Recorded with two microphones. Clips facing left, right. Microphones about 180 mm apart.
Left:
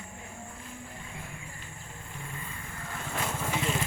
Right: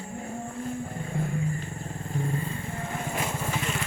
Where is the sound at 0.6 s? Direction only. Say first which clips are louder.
Right 11 dB; 45° right (ahead or behind); by 3.5 s 15° right (ahead or behind).